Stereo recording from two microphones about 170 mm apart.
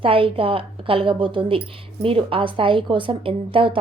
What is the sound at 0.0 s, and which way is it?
A woman's voice, 30° right (ahead or behind).